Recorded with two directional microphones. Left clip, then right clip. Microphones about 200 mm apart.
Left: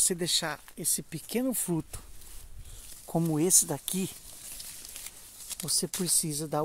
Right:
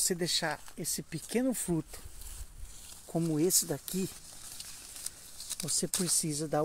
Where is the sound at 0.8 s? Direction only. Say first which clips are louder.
Left 3 dB; 25° left (ahead or behind).